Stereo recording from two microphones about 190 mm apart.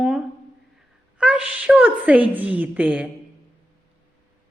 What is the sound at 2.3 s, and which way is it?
Speech, 10° right (ahead or behind).